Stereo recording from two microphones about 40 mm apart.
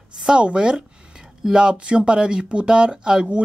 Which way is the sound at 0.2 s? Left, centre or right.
Right.